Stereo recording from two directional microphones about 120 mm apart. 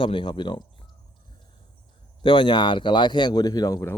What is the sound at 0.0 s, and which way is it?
Speech, 45° left (ahead or behind).